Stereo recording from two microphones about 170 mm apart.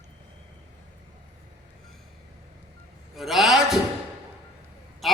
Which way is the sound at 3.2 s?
Centre (ahead or behind).